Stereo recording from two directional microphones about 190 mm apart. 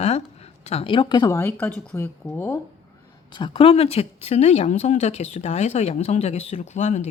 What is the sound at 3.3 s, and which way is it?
Speech, 25° left (ahead or behind).